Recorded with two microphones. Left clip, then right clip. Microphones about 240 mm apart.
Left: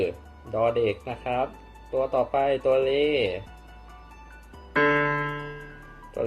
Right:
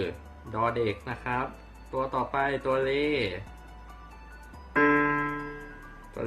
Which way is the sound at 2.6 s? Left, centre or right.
Centre.